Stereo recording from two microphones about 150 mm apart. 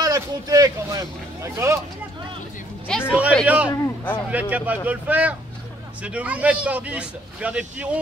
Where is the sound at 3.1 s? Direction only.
10° right (ahead or behind).